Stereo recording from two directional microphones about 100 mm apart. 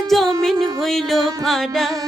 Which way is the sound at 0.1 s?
Centre (ahead or behind).